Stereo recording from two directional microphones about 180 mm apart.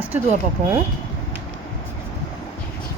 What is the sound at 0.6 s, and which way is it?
Speech, 40° right (ahead or behind).